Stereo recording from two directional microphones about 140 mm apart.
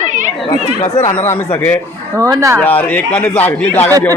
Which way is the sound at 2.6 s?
10° left (ahead or behind).